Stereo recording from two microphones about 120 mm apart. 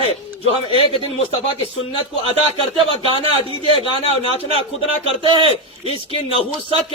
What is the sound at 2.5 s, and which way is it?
Speech, 50° right (ahead or behind).